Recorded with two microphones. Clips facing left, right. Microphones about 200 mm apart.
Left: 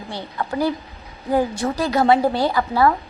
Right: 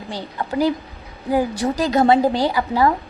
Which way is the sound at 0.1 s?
15° right (ahead or behind).